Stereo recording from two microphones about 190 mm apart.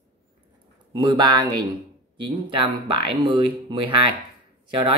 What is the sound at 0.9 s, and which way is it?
Speech, 25° right (ahead or behind).